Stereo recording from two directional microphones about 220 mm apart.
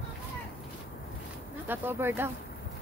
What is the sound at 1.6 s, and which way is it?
Speech, 10° right (ahead or behind).